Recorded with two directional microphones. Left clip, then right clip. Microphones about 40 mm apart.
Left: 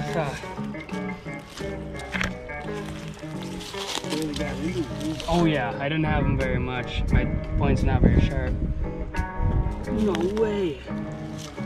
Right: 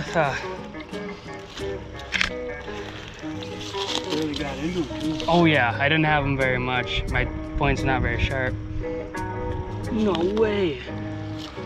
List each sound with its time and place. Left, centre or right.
0.0 s speech: left
3.7 s speech: left
5.6 s speech: left
9.9 s speech: left
10.4 s speech: left